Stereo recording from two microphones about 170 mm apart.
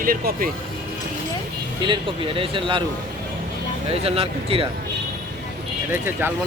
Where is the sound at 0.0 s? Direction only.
55° right (ahead or behind).